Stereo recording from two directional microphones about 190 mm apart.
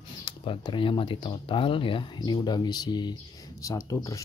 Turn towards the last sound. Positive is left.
turn(degrees=15)  # may be behind; listen again after turning